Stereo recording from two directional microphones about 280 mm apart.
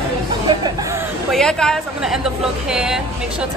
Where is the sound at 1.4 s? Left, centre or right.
Centre.